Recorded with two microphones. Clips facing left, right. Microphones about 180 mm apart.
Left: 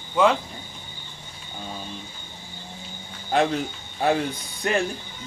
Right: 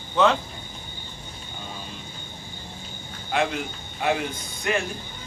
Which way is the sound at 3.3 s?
35° left (ahead or behind).